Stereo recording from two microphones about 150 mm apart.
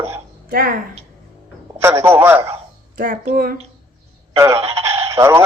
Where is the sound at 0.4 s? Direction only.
80° right.